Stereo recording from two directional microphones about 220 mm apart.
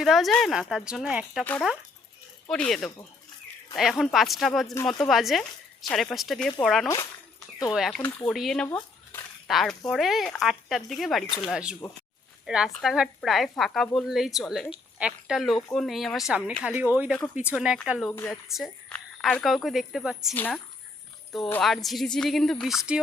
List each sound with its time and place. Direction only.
0.0 s speech: centre (ahead or behind)
6.8 s speech: 15° left (ahead or behind)
7.7 s speech: centre (ahead or behind)
18.1 s speech: 10° left (ahead or behind)
18.4 s speech: centre (ahead or behind)